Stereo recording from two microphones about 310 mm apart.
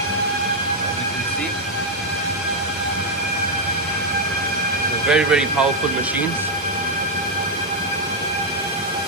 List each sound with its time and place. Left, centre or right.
5.0 s speech: centre